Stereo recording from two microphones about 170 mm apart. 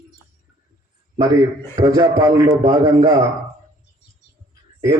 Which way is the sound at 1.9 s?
20° right (ahead or behind).